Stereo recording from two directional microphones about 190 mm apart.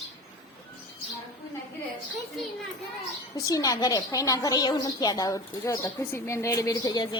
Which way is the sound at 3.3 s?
20° left (ahead or behind).